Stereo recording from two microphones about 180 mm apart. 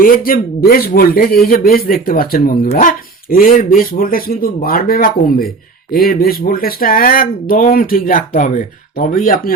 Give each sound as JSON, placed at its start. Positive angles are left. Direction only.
{"t": 0.0, "sound": "a man's voice", "side_deg": 55}